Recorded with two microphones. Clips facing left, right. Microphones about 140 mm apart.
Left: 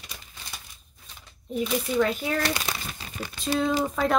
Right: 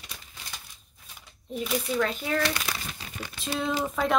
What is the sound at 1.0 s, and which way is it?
Speech, 5° right (ahead or behind).